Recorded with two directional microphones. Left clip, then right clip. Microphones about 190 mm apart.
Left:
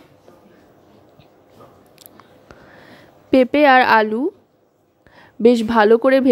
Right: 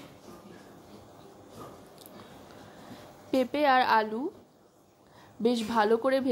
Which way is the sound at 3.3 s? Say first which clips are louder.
Left 13 dB; 40° left (ahead or behind).